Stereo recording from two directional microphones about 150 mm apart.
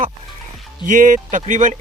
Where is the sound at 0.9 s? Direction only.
60° right (ahead or behind).